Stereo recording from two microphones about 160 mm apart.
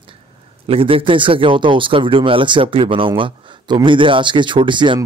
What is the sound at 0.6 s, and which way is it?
Speech, 35° right (ahead or behind).